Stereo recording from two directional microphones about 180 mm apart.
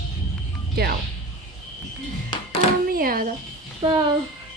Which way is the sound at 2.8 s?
55° right (ahead or behind).